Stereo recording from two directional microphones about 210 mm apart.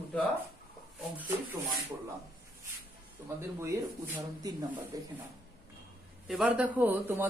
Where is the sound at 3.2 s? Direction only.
15° right (ahead or behind).